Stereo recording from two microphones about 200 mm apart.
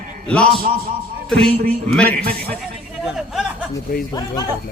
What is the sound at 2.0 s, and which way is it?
Speech, 50° right (ahead or behind).